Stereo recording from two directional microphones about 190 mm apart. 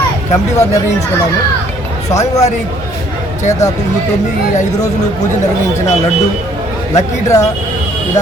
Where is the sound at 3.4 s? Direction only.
40° left (ahead or behind).